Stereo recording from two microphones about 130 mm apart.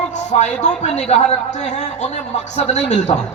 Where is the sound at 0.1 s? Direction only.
65° left (ahead or behind).